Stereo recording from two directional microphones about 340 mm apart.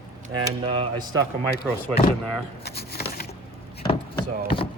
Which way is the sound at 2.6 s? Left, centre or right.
Left.